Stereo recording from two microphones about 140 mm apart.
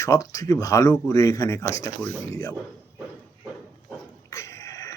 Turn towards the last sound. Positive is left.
turn(degrees=20)  # may be behind; listen again after turning